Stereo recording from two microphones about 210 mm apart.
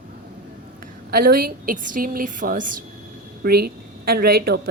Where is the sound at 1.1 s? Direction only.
45° right (ahead or behind).